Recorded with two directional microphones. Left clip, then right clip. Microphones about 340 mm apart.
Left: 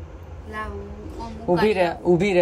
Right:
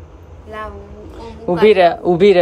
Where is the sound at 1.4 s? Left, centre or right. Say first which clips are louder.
Right 9 dB; right.